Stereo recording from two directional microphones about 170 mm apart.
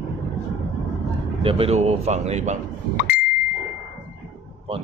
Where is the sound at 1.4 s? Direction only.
35° right (ahead or behind).